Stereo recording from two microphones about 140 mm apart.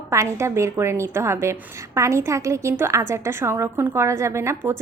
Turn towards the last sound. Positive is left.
turn(degrees=-20)  # may be behind; listen again after turning